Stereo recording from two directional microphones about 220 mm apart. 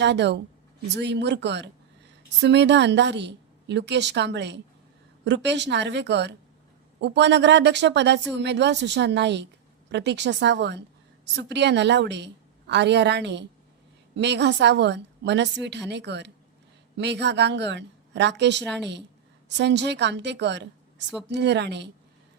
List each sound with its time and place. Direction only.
0.0 s speech: 50° right (ahead or behind)